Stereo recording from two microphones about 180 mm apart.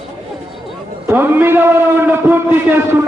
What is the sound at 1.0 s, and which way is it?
A man's voice, 10° right (ahead or behind).